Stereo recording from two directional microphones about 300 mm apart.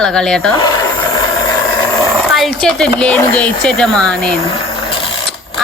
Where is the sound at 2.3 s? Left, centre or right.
Centre.